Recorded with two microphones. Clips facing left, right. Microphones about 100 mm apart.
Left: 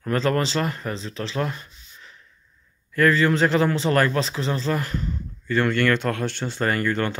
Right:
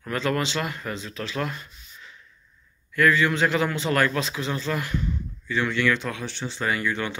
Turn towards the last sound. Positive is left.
turn(degrees=50)  # may be behind; listen again after turning